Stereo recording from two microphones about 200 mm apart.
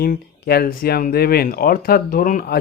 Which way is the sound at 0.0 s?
50° left (ahead or behind).